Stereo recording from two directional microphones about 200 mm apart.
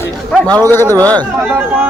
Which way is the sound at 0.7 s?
10° left (ahead or behind).